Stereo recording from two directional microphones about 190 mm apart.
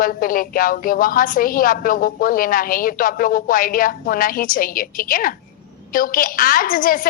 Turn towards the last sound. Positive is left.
turn(degrees=45)  # may be behind; listen again after turning